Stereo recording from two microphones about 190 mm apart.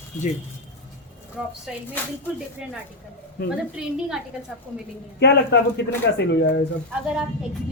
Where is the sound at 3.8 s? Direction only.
5° right (ahead or behind).